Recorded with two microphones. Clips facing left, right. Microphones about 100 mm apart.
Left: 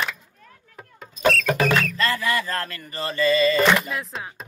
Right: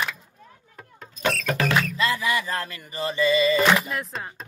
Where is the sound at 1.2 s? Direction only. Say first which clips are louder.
Left 5 dB; 5° left (ahead or behind).